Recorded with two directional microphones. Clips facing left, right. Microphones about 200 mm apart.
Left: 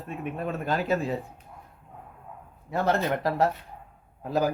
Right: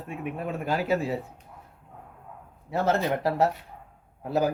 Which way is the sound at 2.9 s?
15° right (ahead or behind).